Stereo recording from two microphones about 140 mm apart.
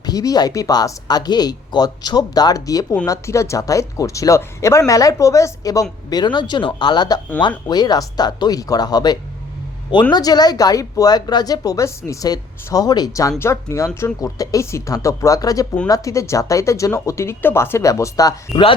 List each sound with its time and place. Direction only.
0.0 s speech: 25° left (ahead or behind)